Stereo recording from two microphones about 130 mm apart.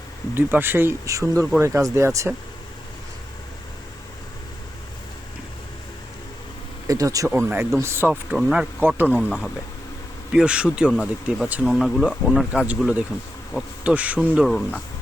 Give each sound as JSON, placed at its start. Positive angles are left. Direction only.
{"t": 0.3, "sound": "speech", "side_deg": -15}
{"t": 6.8, "sound": "speech", "side_deg": -25}
{"t": 7.3, "sound": "speech", "side_deg": -15}
{"t": 9.1, "sound": "speech", "side_deg": -5}